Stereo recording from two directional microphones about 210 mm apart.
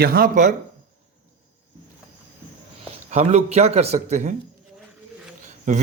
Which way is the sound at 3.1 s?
30° right (ahead or behind).